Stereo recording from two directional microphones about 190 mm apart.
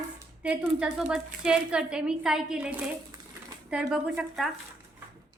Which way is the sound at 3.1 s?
20° right (ahead or behind).